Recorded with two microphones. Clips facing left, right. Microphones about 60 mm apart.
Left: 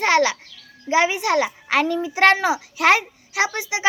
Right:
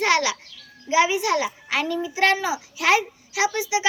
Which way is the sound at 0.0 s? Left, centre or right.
Left.